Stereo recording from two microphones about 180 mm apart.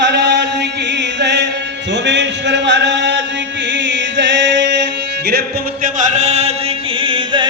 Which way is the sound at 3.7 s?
85° right.